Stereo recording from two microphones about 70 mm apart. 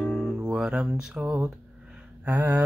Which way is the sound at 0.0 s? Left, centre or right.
Centre.